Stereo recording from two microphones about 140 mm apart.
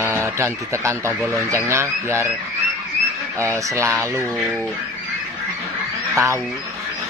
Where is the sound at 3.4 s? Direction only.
20° right (ahead or behind).